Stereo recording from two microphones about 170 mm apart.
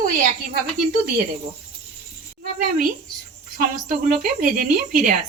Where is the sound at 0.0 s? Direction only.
55° right (ahead or behind).